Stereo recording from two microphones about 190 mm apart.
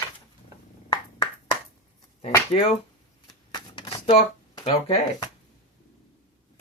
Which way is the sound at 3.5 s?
25° left (ahead or behind).